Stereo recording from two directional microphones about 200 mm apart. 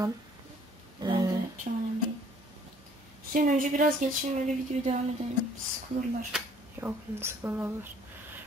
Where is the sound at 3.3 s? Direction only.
40° right (ahead or behind).